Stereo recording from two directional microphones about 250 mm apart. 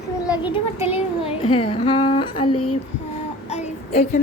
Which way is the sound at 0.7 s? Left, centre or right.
Centre.